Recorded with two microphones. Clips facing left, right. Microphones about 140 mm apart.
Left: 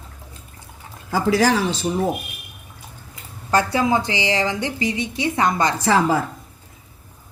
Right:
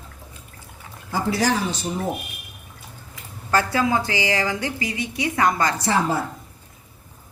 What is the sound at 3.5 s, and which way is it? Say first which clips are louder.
A woman's voice: left 2 dB; 25° left (ahead or behind).